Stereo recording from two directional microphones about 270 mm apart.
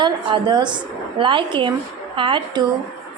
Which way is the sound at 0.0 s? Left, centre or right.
Centre.